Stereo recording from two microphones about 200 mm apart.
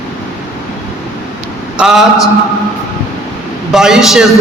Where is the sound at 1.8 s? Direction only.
Centre (ahead or behind).